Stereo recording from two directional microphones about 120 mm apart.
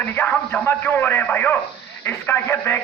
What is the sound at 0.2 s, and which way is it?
A man's voice, 15° left (ahead or behind).